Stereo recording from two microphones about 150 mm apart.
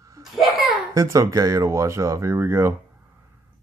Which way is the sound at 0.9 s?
20° right (ahead or behind).